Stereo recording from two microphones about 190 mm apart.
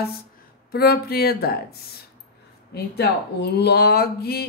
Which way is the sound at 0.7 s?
55° left (ahead or behind).